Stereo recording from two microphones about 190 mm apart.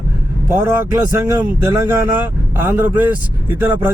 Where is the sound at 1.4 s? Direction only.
15° right (ahead or behind).